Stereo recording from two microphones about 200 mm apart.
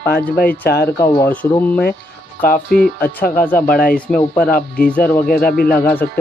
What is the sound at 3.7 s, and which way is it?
Speech, 45° left (ahead or behind).